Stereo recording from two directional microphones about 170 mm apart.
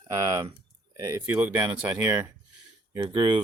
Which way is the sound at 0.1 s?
20° right (ahead or behind).